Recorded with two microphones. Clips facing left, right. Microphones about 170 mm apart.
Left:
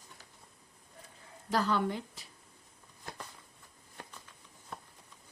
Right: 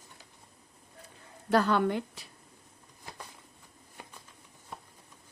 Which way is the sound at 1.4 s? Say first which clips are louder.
Right 5 dB; 65° right (ahead or behind).